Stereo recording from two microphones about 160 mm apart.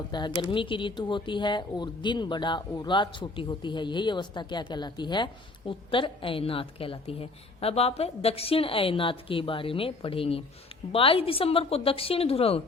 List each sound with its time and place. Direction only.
0.1 s speech: 25° left (ahead or behind)